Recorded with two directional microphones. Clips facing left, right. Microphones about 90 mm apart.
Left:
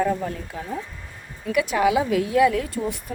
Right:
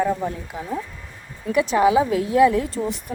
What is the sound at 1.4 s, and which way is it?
A woman's voice, 30° right (ahead or behind).